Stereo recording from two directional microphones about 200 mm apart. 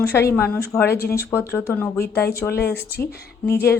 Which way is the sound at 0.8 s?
50° left (ahead or behind).